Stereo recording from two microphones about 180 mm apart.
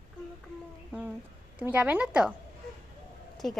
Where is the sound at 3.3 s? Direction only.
Centre (ahead or behind).